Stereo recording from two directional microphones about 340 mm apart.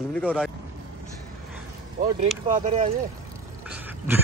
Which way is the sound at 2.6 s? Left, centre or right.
Right.